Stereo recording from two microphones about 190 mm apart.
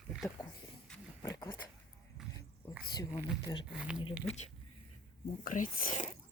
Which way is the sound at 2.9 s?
20° left (ahead or behind).